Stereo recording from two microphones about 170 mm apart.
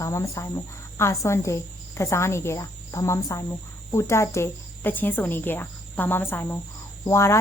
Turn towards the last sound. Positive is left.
turn(degrees=15)  # may be behind; listen again after turning